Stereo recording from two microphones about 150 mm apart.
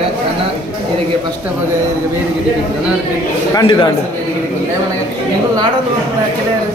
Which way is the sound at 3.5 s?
30° left (ahead or behind).